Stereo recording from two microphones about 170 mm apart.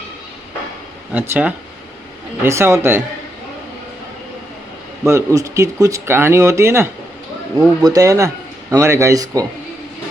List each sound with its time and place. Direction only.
1.1 s speech: 10° right (ahead or behind)
5.0 s speech: 20° right (ahead or behind)